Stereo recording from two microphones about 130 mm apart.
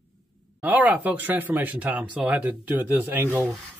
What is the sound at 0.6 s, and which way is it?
Speech, 10° right (ahead or behind).